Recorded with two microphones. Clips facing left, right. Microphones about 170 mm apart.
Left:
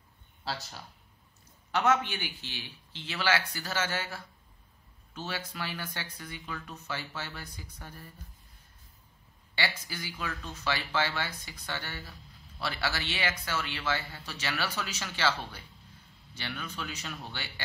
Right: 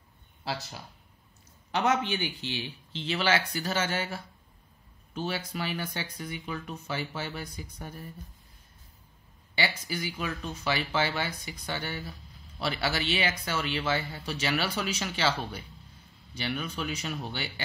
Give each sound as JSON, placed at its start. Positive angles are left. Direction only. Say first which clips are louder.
{"t": 1.7, "sound": "a man's voice", "louder": "even", "side_deg": -15}
{"t": 9.6, "sound": "a man's voice", "louder": "right 4 dB", "side_deg": -15}